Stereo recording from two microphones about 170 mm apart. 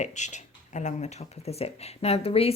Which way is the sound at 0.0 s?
45° left (ahead or behind).